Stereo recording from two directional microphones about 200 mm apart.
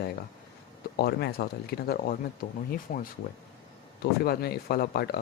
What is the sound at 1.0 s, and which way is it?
Speech, 55° left (ahead or behind).